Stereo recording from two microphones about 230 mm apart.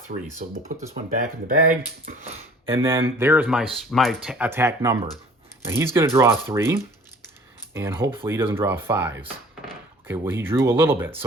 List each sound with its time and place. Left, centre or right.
0.1 s speech: right
2.7 s speech: centre